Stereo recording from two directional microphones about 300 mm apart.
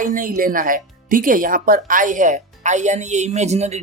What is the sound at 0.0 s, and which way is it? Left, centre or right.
Speech, right.